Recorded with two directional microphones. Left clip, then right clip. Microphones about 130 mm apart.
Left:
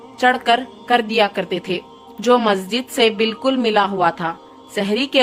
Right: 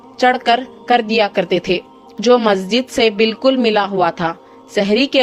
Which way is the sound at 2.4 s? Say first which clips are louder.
Right 4 dB; 30° right (ahead or behind).